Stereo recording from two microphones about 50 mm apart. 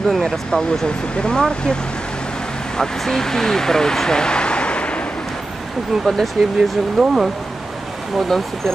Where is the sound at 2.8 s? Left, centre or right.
Centre.